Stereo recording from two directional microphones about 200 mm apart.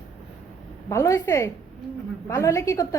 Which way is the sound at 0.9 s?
15° left (ahead or behind).